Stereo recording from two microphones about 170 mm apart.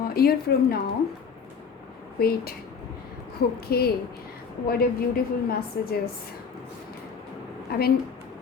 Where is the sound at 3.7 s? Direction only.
65° left (ahead or behind).